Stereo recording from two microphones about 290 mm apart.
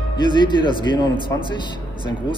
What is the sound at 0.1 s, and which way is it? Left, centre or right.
Speech, centre.